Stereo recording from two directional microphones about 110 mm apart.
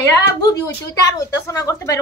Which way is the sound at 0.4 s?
30° left (ahead or behind).